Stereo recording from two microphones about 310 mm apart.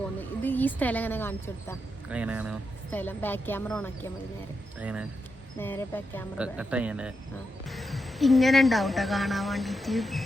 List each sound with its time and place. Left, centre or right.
0.2 s speech: centre
2.0 s speech: centre
2.9 s speech: centre
5.5 s speech: centre